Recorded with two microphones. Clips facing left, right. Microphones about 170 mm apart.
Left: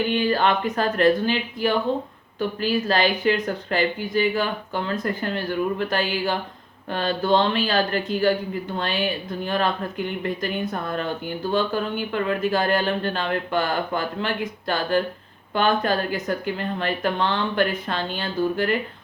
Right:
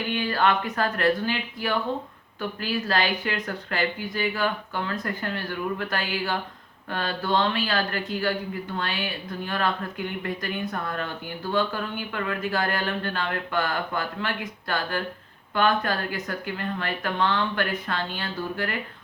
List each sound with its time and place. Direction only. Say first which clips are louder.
0.0 s speech: left 4 dB; 25° left (ahead or behind)